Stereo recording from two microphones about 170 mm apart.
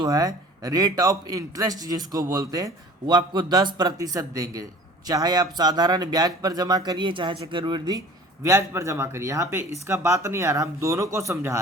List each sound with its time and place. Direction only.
0.0 s speech: 20° right (ahead or behind)